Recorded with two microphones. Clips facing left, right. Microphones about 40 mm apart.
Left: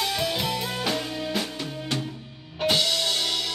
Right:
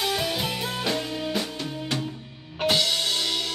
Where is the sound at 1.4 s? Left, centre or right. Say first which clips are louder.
Even; centre.